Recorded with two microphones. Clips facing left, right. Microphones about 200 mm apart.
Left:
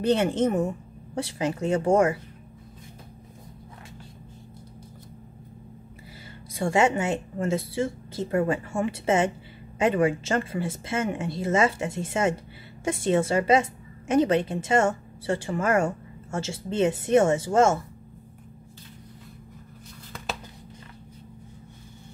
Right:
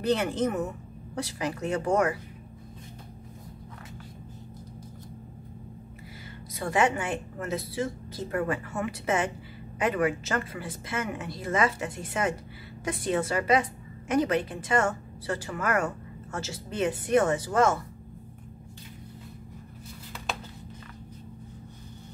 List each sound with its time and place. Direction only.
0.0 s a woman's voice: 25° left (ahead or behind)
6.5 s a woman's voice: 25° left (ahead or behind)